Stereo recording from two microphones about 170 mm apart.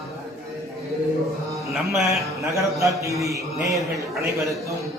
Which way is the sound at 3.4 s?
20° right (ahead or behind).